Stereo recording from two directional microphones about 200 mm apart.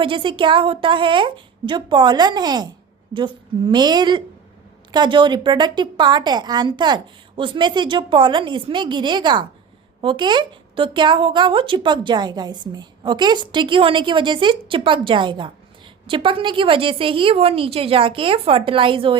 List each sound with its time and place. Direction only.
0.0 s speech: 25° right (ahead or behind)